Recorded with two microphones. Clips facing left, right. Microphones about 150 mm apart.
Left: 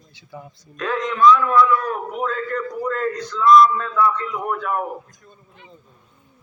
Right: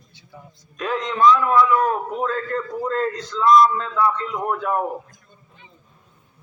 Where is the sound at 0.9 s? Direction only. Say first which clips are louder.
Left 1 dB; 25° right (ahead or behind).